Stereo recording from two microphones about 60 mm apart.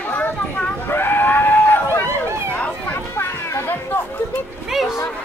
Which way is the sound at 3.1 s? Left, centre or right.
Left.